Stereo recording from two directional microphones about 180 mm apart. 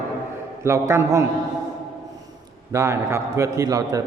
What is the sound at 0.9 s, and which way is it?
Speech, 15° right (ahead or behind).